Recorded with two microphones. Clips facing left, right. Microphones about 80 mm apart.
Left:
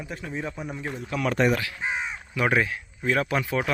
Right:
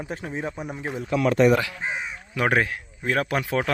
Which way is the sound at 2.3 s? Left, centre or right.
Right.